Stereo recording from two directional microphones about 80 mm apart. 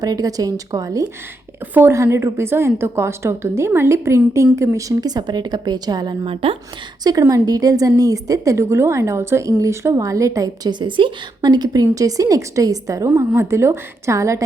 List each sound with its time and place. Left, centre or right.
0.0 s a woman's voice: right
4.9 s speech: right
7.0 s a woman's voice: right
10.7 s a woman's voice: right
13.1 s a woman's voice: right